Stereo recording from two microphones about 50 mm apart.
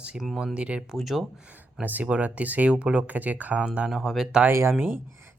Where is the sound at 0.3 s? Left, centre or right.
Centre.